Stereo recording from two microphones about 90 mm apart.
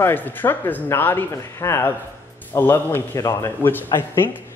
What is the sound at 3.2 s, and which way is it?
Speech, 40° left (ahead or behind).